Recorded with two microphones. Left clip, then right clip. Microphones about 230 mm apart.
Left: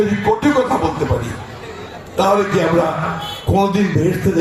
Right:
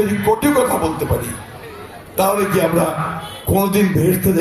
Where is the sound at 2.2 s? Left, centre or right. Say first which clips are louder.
Left 1 dB; right.